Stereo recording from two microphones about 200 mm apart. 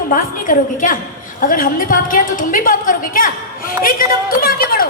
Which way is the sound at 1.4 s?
45° left (ahead or behind).